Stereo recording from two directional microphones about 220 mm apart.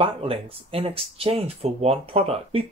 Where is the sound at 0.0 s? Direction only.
25° right (ahead or behind).